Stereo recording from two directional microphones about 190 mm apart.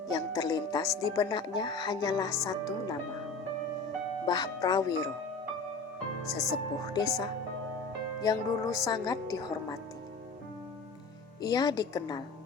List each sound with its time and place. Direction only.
0.1 s speech: 20° left (ahead or behind)
4.3 s speech: 20° left (ahead or behind)
6.2 s speech: centre (ahead or behind)
6.8 s speech: 20° left (ahead or behind)
11.4 s speech: 20° left (ahead or behind)